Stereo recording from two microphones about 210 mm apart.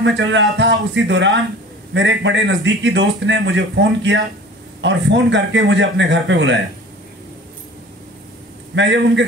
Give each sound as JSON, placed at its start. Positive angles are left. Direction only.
{"t": 0.0, "sound": "a man's voice", "side_deg": -60}
{"t": 8.7, "sound": "a man's voice", "side_deg": -60}